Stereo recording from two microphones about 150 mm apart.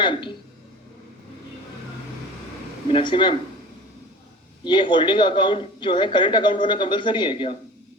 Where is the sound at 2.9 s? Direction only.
35° left (ahead or behind).